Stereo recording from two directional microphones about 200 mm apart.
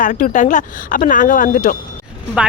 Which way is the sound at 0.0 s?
40° left (ahead or behind).